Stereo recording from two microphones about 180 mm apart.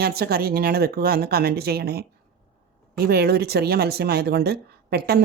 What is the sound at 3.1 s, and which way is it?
A woman's voice, 60° right (ahead or behind).